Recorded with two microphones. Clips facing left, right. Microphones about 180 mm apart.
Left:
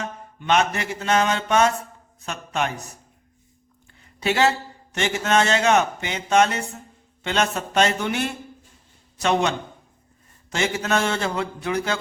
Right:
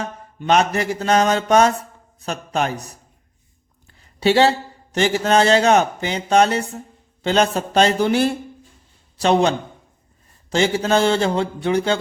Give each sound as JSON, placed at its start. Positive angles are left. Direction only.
{"t": 0.0, "sound": "a man's voice", "side_deg": -35}
{"t": 4.2, "sound": "a man's voice", "side_deg": -30}